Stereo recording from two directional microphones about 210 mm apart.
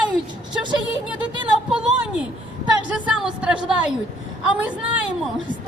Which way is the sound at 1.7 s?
5° right (ahead or behind).